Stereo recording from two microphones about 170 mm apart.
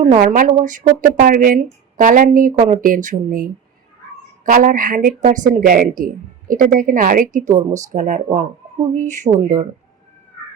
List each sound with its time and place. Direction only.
0.0 s speech: 45° right (ahead or behind)